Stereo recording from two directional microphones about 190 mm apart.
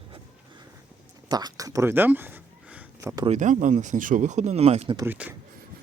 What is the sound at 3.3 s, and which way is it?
Speech, 40° right (ahead or behind).